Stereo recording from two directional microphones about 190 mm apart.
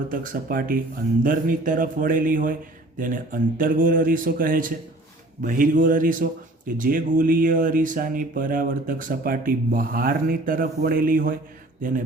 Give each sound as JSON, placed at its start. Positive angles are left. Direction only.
{"t": 0.1, "sound": "speech", "side_deg": -50}